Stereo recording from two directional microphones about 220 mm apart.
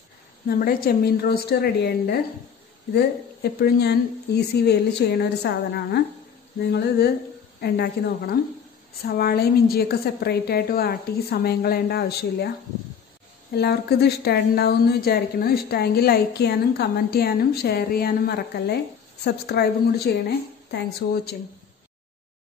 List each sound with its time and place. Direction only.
0.6 s a woman's voice: 40° left (ahead or behind)
3.4 s a woman's voice: 45° left (ahead or behind)
7.6 s a woman's voice: 45° left (ahead or behind)
13.5 s a woman's voice: 45° left (ahead or behind)